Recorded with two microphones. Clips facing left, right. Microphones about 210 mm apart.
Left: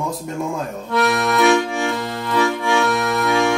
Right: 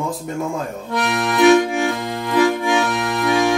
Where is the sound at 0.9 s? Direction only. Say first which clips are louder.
Left 3 dB; 15° right (ahead or behind).